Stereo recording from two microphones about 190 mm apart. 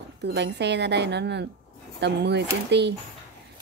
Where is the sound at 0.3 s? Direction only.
65° right (ahead or behind).